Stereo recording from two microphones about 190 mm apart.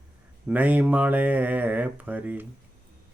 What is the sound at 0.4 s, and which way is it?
Mantra, 10° right (ahead or behind).